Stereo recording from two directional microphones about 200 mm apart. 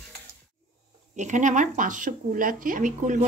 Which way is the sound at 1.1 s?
40° right (ahead or behind).